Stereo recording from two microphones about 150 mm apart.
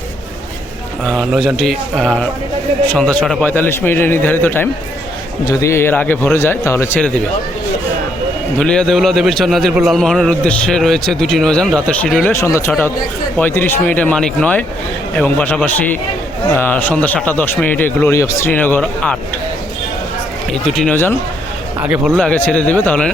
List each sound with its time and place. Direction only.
1.0 s a man's voice: centre (ahead or behind); by 7.0 s 15° left (ahead or behind)
8.5 s a man's voice: 5° left (ahead or behind)
20.5 s a man's voice: 5° left (ahead or behind)
20.9 s a man's voice: 15° left (ahead or behind)
21.8 s speech: 5° right (ahead or behind)
22.2 s a man's voice: 10° left (ahead or behind)